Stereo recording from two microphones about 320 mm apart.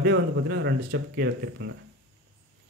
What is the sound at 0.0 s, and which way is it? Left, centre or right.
Speech, right.